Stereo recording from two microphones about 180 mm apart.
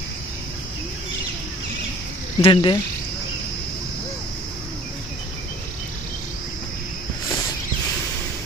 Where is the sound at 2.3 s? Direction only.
30° left (ahead or behind).